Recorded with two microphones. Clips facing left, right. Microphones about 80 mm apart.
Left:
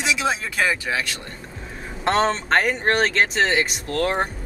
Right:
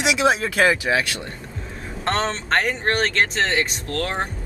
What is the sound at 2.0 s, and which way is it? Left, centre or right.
Speech, centre.